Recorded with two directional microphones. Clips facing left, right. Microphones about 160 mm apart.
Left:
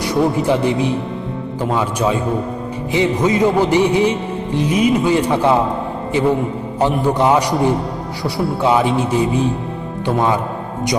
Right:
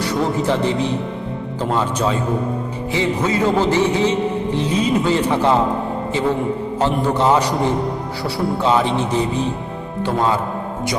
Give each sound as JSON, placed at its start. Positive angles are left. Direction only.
{"t": 0.0, "sound": "music", "side_deg": 10}
{"t": 6.7, "sound": "music", "side_deg": 15}